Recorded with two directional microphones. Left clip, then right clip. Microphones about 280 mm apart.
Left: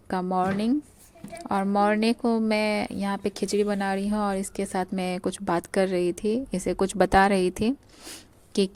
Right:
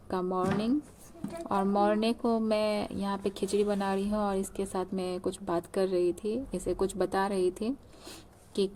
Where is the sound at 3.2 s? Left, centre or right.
Left.